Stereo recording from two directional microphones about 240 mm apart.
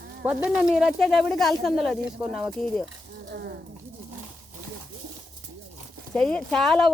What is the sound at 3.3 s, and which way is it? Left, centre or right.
Speech, right.